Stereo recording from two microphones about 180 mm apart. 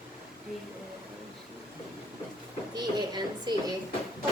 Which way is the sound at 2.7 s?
25° right (ahead or behind).